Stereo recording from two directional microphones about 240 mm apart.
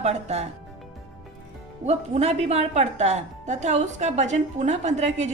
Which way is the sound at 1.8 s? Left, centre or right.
Right.